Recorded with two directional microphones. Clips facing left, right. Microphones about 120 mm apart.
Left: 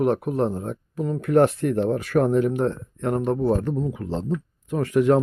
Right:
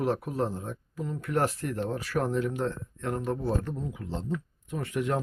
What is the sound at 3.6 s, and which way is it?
Speech, 65° left (ahead or behind).